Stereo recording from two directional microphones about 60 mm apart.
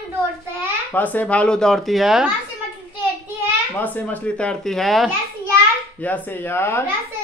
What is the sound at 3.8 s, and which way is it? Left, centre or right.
Speech, left.